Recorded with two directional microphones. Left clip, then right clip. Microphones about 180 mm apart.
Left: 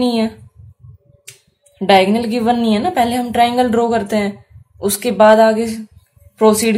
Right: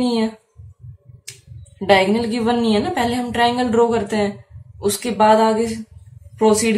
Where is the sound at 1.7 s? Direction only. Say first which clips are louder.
Left 3 dB; 50° left (ahead or behind).